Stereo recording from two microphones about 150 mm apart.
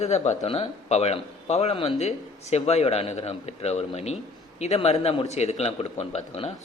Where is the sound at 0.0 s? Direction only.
45° left (ahead or behind).